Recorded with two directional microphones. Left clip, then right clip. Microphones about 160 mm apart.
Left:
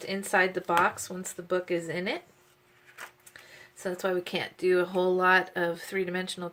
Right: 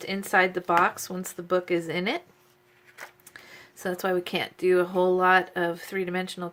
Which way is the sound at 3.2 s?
35° right (ahead or behind).